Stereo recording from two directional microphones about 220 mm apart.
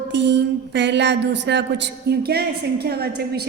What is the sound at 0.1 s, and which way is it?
A woman's voice, 50° right (ahead or behind).